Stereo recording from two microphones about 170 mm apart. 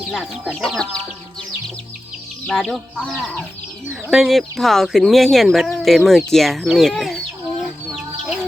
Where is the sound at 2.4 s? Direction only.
5° left (ahead or behind).